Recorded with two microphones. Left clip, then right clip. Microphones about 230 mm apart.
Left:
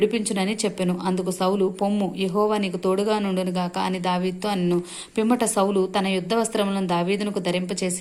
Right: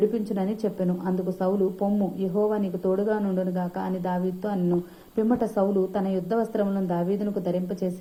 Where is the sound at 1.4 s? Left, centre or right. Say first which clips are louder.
Left 2 dB; left.